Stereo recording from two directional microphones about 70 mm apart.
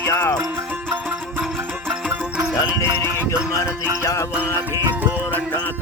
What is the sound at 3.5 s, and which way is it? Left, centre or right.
Music, left.